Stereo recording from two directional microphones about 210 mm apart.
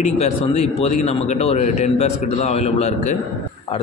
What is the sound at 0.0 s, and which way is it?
A man's voice, 30° left (ahead or behind).